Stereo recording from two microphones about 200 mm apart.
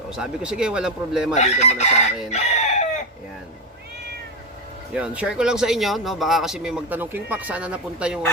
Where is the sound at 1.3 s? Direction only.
35° left (ahead or behind).